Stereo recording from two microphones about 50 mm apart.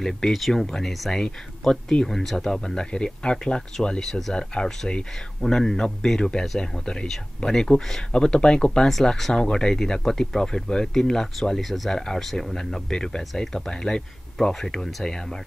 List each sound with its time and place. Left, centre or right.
0.0 s speech: centre
9.3 s speech: centre